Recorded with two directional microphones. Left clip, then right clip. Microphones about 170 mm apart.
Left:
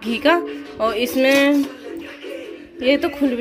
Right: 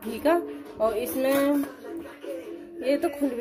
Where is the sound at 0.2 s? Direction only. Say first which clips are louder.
Left 6 dB; 10° left (ahead or behind).